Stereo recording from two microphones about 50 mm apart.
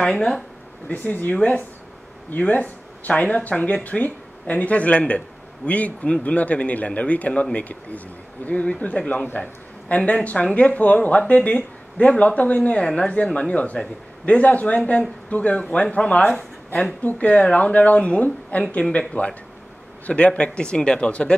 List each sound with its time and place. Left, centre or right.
0.0 s speech: centre
0.8 s a man's voice: left
17.0 s a man's voice: left